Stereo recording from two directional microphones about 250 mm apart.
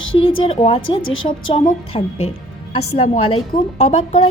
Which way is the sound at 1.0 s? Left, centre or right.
Left.